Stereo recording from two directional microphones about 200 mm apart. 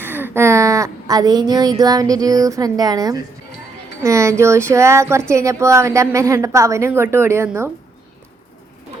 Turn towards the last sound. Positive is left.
turn(degrees=-10)  # may be behind; listen again after turning